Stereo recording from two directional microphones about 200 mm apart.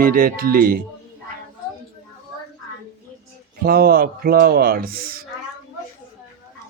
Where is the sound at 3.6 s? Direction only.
50° right (ahead or behind).